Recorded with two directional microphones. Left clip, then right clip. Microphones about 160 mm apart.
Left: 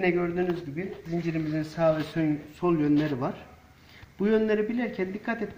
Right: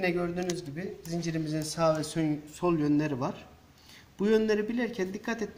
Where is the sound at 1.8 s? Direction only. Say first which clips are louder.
Left 2 dB; 35° right (ahead or behind).